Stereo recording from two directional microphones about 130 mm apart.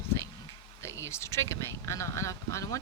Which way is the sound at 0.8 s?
20° left (ahead or behind).